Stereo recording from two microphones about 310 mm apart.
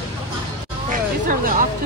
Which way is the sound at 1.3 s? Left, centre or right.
Right.